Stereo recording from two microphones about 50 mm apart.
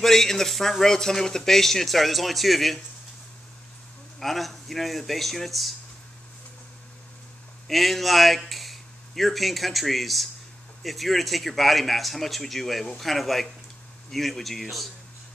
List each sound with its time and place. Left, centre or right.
0.0 s speech: centre
4.2 s speech: centre
7.6 s a man's voice: centre